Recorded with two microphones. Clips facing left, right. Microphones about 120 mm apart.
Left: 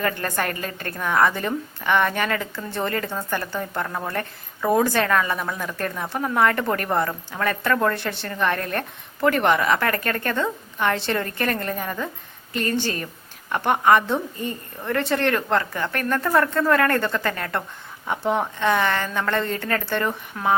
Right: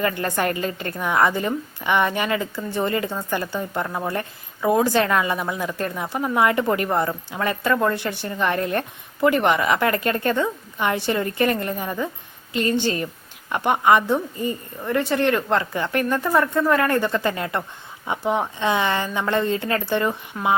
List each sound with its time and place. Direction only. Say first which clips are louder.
0.0 s a woman's voice: right 2 dB; 20° right (ahead or behind)